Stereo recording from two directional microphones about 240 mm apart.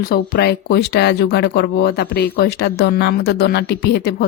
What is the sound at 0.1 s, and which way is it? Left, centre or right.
Speech, left.